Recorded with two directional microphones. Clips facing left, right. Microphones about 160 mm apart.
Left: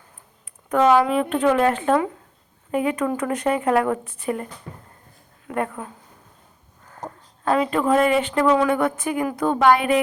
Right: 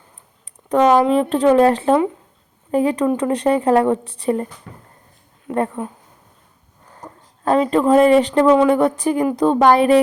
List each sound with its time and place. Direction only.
0.9 s speech: 35° right (ahead or behind)
5.5 s speech: 30° right (ahead or behind)
7.4 s speech: 35° right (ahead or behind)